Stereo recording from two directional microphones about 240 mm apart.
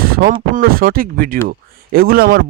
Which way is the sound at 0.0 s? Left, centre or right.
Right.